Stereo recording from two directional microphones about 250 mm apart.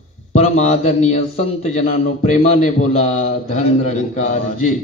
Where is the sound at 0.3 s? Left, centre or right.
Left.